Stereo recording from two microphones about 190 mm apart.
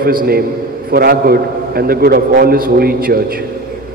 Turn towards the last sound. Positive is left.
turn(degrees=-50)  # may be behind; listen again after turning